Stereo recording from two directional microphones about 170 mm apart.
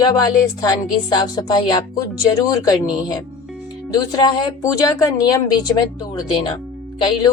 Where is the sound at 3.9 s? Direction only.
25° left (ahead or behind).